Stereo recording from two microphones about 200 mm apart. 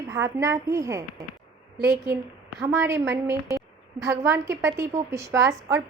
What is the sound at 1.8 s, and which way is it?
Speech, 55° right (ahead or behind).